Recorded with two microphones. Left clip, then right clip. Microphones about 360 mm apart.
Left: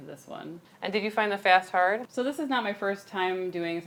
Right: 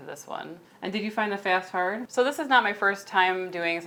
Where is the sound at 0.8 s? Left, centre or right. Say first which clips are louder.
Left 1 dB; left.